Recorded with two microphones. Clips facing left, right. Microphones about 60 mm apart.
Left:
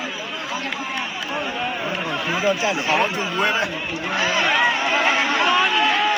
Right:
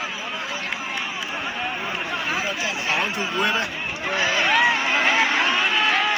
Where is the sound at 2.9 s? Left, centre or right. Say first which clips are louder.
Left 1 dB; left.